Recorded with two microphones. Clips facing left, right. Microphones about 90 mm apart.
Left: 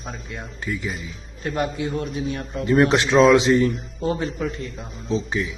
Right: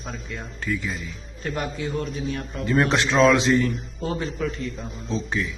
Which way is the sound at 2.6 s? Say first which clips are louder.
Left 4 dB; 30° left (ahead or behind).